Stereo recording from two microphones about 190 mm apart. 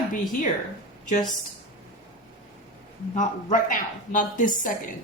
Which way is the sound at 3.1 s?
40° left (ahead or behind).